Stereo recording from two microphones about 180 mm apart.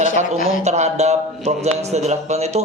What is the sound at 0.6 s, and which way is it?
Speech, 40° right (ahead or behind).